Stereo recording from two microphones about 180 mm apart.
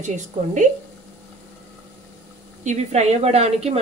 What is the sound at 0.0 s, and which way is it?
Speech, 40° right (ahead or behind).